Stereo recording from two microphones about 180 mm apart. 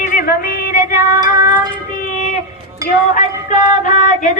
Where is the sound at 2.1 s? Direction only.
40° left (ahead or behind).